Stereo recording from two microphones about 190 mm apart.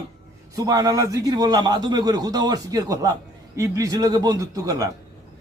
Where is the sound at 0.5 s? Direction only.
20° right (ahead or behind).